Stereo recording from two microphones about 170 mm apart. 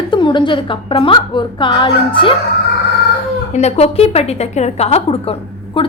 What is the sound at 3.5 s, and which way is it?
A woman's voice, 40° left (ahead or behind).